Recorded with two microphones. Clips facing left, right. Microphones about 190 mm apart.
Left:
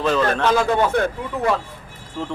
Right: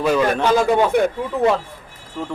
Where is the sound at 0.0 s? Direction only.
10° right (ahead or behind).